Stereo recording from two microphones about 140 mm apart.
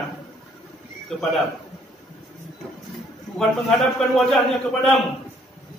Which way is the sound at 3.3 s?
5° left (ahead or behind).